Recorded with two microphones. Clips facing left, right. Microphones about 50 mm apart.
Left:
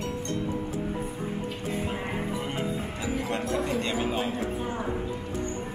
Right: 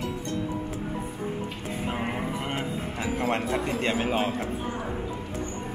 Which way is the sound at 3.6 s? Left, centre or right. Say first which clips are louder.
Left 1 dB; centre.